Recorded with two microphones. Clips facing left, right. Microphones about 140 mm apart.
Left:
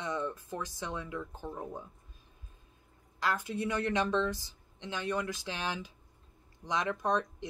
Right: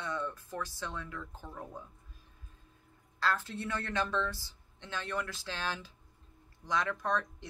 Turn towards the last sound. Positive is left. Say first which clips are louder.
# left 3 dB
turn(degrees=20)  # may be behind; listen again after turning